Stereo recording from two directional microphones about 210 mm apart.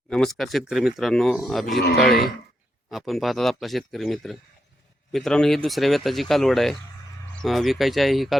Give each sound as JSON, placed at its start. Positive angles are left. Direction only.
{"t": 0.1, "sound": "speech", "side_deg": 0}
{"t": 1.8, "sound": "speech", "side_deg": 50}
{"t": 2.9, "sound": "speech", "side_deg": 0}